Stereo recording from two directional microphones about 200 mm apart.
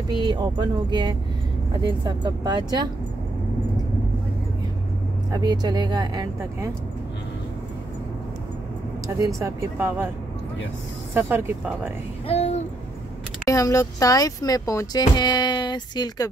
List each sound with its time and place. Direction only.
0.2 s speech: 20° right (ahead or behind)
5.3 s speech: 20° right (ahead or behind)
9.0 s speech: 15° right (ahead or behind)
11.1 s speech: 10° right (ahead or behind)
12.3 s a sound: 35° left (ahead or behind)
13.5 s speech: 15° left (ahead or behind)